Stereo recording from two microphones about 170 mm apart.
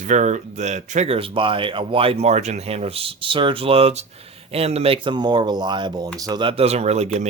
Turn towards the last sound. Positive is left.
turn(degrees=-40)  # may be behind; listen again after turning